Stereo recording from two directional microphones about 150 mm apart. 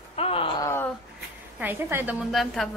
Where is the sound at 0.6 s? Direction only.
15° left (ahead or behind).